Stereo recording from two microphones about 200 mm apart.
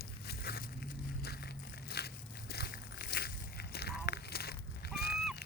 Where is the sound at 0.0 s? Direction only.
50° left (ahead or behind).